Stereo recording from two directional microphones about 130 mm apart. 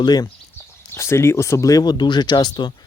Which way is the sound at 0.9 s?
20° left (ahead or behind).